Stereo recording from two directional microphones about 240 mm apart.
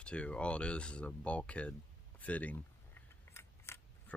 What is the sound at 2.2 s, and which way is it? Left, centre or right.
Camera, centre.